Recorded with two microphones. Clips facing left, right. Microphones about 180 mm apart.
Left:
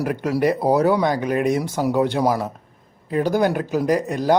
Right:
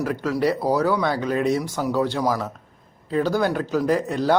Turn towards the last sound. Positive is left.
turn(degrees=15)  # may be behind; listen again after turning